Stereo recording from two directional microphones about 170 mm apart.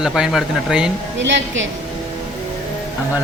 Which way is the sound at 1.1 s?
90° right.